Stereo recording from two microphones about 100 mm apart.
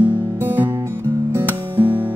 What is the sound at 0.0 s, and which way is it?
Music, 20° right (ahead or behind).